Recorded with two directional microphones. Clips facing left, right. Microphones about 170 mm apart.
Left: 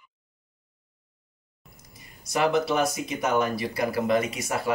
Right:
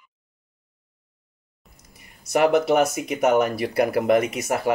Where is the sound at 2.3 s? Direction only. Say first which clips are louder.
Right 5 dB; 60° right (ahead or behind).